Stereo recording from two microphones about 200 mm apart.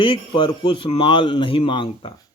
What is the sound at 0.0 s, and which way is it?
A man's voice, 25° left (ahead or behind).